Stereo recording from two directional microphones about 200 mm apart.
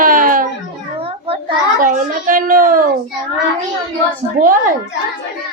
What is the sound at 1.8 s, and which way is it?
A child's voice, 40° right (ahead or behind).